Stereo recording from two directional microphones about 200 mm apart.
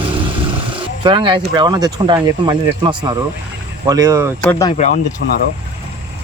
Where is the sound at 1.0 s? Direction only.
25° right (ahead or behind).